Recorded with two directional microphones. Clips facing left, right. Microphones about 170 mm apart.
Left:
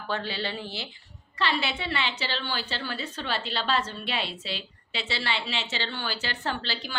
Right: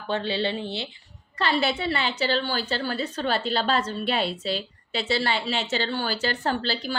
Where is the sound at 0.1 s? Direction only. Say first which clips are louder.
Right 6 dB; 25° right (ahead or behind).